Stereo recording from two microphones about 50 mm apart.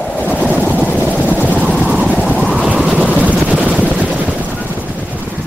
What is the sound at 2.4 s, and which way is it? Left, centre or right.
Vehicle, centre.